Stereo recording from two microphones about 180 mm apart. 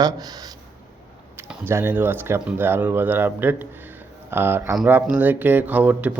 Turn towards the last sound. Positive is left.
turn(degrees=-10)  # may be behind; listen again after turning